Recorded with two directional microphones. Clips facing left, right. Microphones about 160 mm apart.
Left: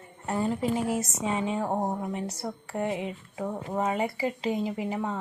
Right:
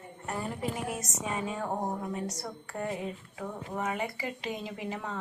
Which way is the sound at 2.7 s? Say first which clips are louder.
Left 4 dB; 15° left (ahead or behind).